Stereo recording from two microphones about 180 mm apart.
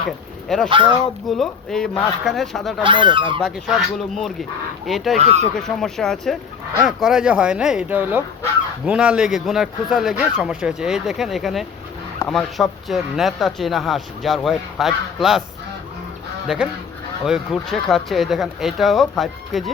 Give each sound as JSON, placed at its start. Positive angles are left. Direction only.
{"t": 0.4, "sound": "speech", "side_deg": 0}
{"t": 2.8, "sound": "speech", "side_deg": -25}
{"t": 3.4, "sound": "speech", "side_deg": 0}
{"t": 5.1, "sound": "speech", "side_deg": -40}
{"t": 5.5, "sound": "speech", "side_deg": 5}
{"t": 17.2, "sound": "speech", "side_deg": 0}